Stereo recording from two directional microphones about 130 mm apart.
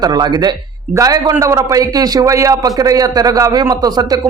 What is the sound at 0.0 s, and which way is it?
A man's voice, 30° right (ahead or behind).